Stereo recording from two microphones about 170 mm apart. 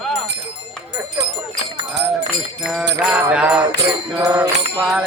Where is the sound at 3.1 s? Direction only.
10° right (ahead or behind).